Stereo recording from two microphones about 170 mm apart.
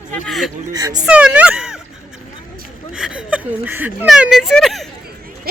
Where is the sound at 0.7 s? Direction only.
20° right (ahead or behind).